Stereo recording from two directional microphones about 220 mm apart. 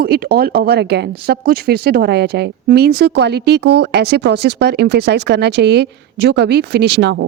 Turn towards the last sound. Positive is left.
turn(degrees=-50)  # may be behind; listen again after turning